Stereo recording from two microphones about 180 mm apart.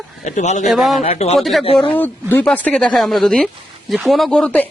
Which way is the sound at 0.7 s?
Centre (ahead or behind).